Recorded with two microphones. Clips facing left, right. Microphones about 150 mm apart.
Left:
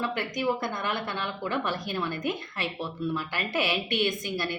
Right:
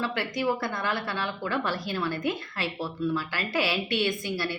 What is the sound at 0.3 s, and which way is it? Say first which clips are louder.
A woman's voice: right 1 dB; 20° left (ahead or behind).